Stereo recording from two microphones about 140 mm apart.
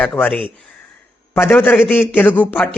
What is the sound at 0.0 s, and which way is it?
A man's voice, 10° left (ahead or behind).